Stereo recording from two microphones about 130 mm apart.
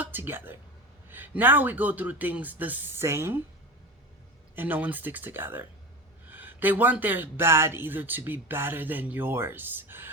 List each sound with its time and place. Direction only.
0.0 s speech: 15° right (ahead or behind)
4.5 s speech: 15° right (ahead or behind)